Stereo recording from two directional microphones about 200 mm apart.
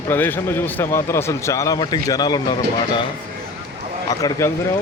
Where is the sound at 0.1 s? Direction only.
10° left (ahead or behind).